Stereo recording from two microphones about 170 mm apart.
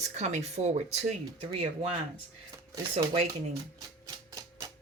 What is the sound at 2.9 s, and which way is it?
Speech, 35° right (ahead or behind).